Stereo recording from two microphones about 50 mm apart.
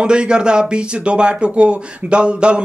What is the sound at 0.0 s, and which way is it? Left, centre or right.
Speech, centre.